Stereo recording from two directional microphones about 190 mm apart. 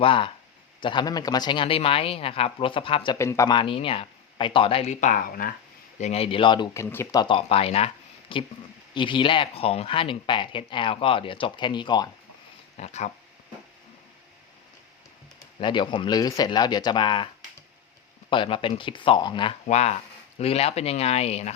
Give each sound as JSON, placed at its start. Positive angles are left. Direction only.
{"t": 0.0, "sound": "speech", "side_deg": 25}
{"t": 3.2, "sound": "speech", "side_deg": 15}
{"t": 6.0, "sound": "speech", "side_deg": 35}
{"t": 6.8, "sound": "speech", "side_deg": 15}
{"t": 12.7, "sound": "speech", "side_deg": 35}
{"t": 15.6, "sound": "speech", "side_deg": 25}
{"t": 18.3, "sound": "speech", "side_deg": 25}
{"t": 19.6, "sound": "speech", "side_deg": 35}